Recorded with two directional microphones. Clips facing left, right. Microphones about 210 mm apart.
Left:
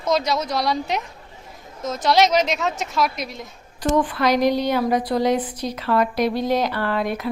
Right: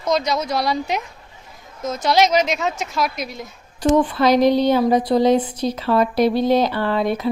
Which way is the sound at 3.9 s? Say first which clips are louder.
Right 4 dB; 25° right (ahead or behind).